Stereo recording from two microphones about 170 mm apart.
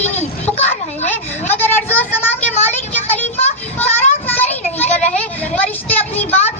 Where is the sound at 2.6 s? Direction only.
40° left (ahead or behind).